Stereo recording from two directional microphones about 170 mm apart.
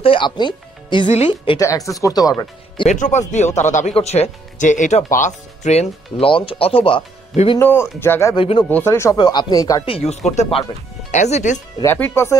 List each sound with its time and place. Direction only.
0.0 s speech: 30° left (ahead or behind)
1.0 s speech: 40° left (ahead or behind)
1.6 s speech: 20° left (ahead or behind)
2.9 s speech: 45° left (ahead or behind)
7.5 s speech: 15° left (ahead or behind)
8.4 s speech: 30° left (ahead or behind)
8.6 s speech: 15° left (ahead or behind)
9.1 s speech: 25° left (ahead or behind)
9.8 s speech: 35° left (ahead or behind)
11.8 s speech: 10° left (ahead or behind)